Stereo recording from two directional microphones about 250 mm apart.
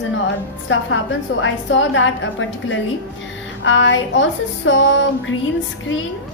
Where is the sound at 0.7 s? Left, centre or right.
Left.